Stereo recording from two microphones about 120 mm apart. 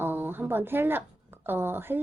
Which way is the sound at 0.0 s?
15° right (ahead or behind).